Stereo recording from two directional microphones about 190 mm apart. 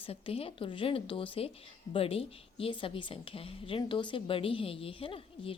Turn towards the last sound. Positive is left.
turn(degrees=30)  # may be behind; listen again after turning